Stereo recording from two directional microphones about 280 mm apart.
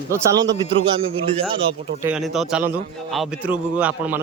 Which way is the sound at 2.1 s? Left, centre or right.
Centre.